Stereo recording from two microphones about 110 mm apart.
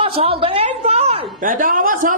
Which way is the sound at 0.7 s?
75° right (ahead or behind).